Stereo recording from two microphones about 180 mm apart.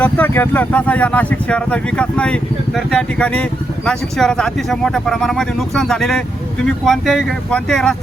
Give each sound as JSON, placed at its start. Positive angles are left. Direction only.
{"t": 0.0, "sound": "speech", "side_deg": 10}